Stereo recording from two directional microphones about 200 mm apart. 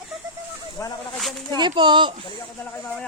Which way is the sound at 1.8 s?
25° right (ahead or behind).